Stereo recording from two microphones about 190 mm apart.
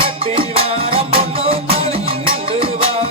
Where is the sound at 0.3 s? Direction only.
30° right (ahead or behind).